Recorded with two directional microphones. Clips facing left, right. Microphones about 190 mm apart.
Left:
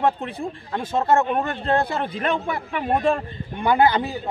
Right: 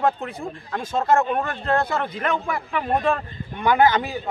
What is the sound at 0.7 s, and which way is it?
A man's voice, 20° left (ahead or behind).